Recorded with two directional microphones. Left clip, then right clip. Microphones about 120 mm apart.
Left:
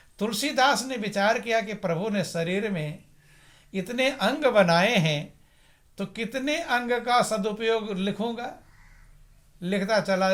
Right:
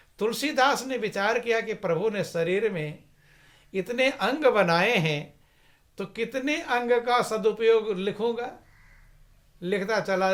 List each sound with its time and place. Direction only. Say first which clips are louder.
0.2 s speech: even; 40° right (ahead or behind)
9.6 s speech: left 1 dB; 35° right (ahead or behind)